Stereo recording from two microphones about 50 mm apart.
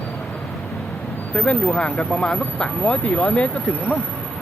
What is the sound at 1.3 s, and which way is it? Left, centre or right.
Speech, left.